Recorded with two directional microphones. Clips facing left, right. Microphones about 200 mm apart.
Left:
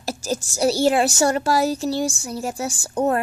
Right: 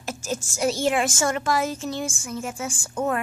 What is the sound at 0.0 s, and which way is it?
A woman's voice, 35° left (ahead or behind).